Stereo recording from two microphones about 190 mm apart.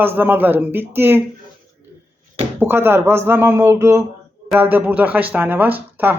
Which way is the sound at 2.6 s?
10° right (ahead or behind).